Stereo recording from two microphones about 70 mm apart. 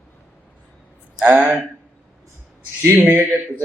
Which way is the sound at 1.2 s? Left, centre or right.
Right.